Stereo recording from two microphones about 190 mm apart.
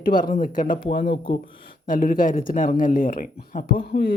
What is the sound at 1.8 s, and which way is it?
Speech, 45° left (ahead or behind).